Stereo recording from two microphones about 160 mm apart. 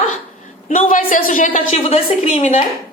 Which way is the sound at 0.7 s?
55° left (ahead or behind).